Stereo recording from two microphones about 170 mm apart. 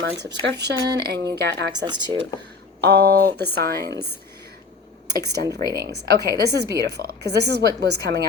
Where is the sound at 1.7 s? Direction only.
25° right (ahead or behind).